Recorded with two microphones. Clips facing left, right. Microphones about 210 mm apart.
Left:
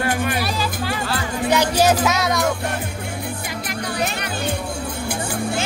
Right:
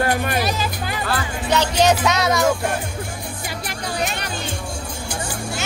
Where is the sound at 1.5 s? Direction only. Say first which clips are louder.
Even; 10° left (ahead or behind).